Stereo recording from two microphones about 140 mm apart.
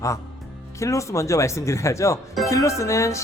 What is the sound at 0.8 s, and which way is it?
Speech, 20° left (ahead or behind).